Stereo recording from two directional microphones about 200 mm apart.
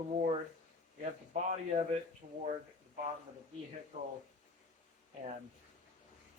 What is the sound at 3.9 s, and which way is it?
Speech, 35° right (ahead or behind).